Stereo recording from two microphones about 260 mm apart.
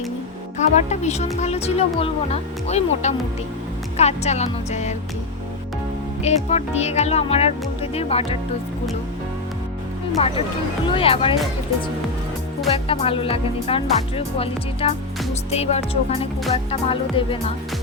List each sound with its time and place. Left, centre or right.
0.9 s speech: left
6.2 s speech: left
10.2 s speech: left
12.6 s speech: left